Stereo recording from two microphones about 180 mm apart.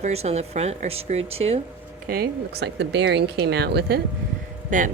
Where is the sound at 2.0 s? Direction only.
60° right (ahead or behind).